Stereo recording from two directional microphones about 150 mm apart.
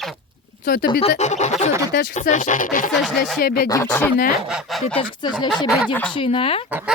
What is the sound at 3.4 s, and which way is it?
Speech, 80° left.